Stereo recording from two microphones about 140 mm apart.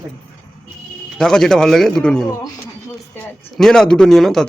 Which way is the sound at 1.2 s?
5° left (ahead or behind).